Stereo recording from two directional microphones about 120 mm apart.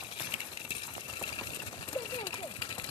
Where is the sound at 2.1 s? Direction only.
45° left (ahead or behind).